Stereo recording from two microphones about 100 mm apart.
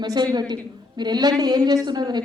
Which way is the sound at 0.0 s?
45° right (ahead or behind).